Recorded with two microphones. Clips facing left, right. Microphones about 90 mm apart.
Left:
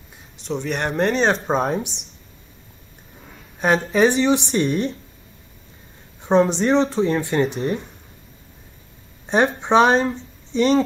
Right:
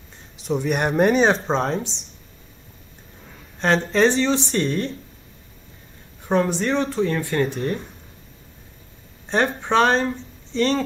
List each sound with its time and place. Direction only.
0.4 s speech: 5° right (ahead or behind)
1.5 s speech: 10° left (ahead or behind)
3.5 s speech: 10° left (ahead or behind)
6.2 s speech: 20° left (ahead or behind)
9.2 s speech: 15° left (ahead or behind)